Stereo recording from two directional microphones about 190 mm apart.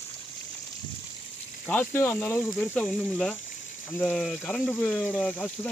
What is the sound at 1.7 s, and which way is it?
Speech, 10° left (ahead or behind).